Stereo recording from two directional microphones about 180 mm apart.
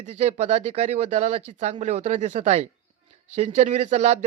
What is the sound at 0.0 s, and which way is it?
Speech, 40° right (ahead or behind).